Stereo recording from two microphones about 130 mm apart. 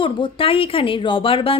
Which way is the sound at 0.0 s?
40° left (ahead or behind).